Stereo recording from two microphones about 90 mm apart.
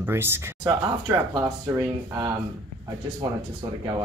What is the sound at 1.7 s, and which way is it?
Speech, 40° right (ahead or behind).